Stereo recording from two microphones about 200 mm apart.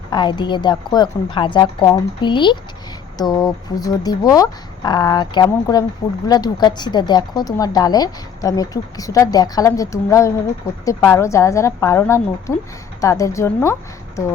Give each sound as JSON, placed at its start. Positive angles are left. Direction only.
{"t": 0.1, "sound": "a woman's voice", "side_deg": 20}